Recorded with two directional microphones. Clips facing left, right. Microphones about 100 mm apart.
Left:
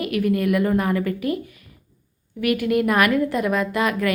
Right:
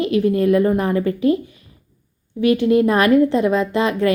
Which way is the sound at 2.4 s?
25° right (ahead or behind).